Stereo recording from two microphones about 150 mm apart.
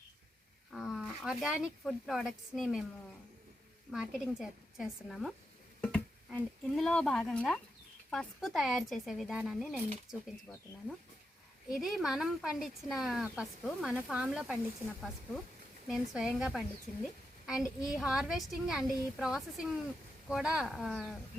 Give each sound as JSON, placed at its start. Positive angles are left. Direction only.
{"t": 0.7, "sound": "speech", "side_deg": 0}
{"t": 3.9, "sound": "speech", "side_deg": -5}
{"t": 11.7, "sound": "speech", "side_deg": 0}
{"t": 15.9, "sound": "speech", "side_deg": -5}
{"t": 17.4, "sound": "a sound", "side_deg": -5}
{"t": 17.8, "sound": "speech", "side_deg": -5}